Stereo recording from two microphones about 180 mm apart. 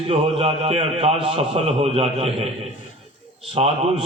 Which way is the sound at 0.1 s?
30° right (ahead or behind).